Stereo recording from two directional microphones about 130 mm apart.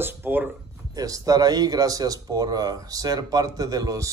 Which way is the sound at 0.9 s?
25° right (ahead or behind).